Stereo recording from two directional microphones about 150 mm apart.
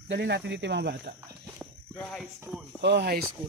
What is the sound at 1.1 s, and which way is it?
Speech, 80° right.